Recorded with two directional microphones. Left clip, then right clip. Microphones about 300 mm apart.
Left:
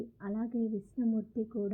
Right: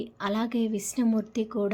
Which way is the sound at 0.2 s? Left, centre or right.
Centre.